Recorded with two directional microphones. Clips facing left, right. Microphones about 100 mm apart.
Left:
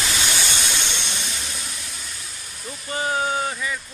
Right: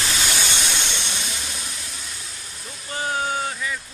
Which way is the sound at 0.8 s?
Centre (ahead or behind).